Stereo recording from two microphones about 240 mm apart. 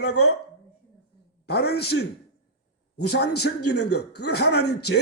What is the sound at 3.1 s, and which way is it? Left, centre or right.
Speech, left.